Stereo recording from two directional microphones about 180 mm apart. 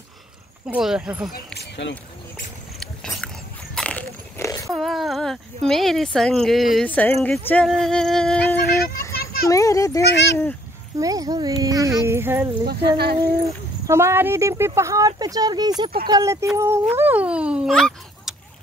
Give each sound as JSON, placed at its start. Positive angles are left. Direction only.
{"t": 0.7, "sound": "speech", "side_deg": -5}
{"t": 1.3, "sound": "speech", "side_deg": 65}
{"t": 3.7, "sound": "a sound", "side_deg": 5}
{"t": 4.7, "sound": "speech", "side_deg": 0}
{"t": 8.6, "sound": "a sound", "side_deg": 60}
{"t": 9.2, "sound": "children playing", "side_deg": 55}
{"t": 9.5, "sound": "a child's voice", "side_deg": 20}
{"t": 11.0, "sound": "speech", "side_deg": -20}
{"t": 12.6, "sound": "speech", "side_deg": -60}
{"t": 13.8, "sound": "speech", "side_deg": -15}